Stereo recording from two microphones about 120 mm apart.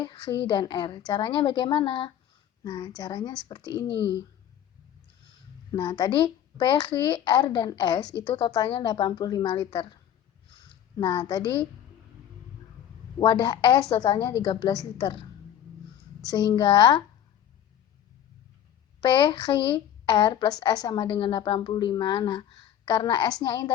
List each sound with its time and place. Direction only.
0.0 s speech: 40° left (ahead or behind)
2.6 s speech: 35° left (ahead or behind)
5.7 s speech: 35° left (ahead or behind)
13.1 s a woman's voice: 40° left (ahead or behind)
16.2 s speech: 35° left (ahead or behind)
18.9 s speech: 45° left (ahead or behind)